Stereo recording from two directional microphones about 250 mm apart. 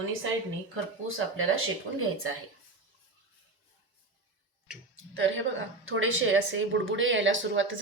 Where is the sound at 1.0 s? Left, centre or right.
Right.